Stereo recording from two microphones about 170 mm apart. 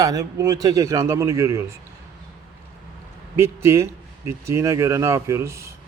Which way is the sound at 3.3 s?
15° right (ahead or behind).